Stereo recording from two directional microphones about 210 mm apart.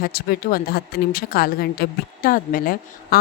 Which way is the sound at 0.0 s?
45° left (ahead or behind).